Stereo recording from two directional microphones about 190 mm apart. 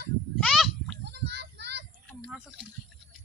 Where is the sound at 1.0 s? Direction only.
65° right (ahead or behind).